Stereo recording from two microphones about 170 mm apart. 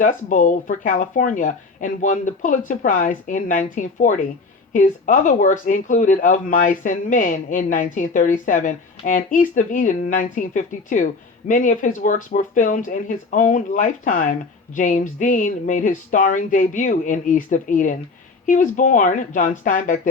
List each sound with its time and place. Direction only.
0.0 s speech: 50° left (ahead or behind)